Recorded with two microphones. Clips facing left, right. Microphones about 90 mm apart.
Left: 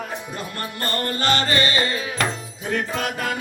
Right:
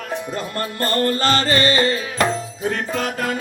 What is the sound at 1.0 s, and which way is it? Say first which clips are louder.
Music: right 4 dB; 35° right (ahead or behind).